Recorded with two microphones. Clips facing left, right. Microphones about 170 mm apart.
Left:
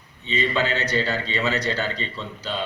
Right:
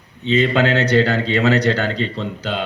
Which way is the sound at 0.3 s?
70° right (ahead or behind).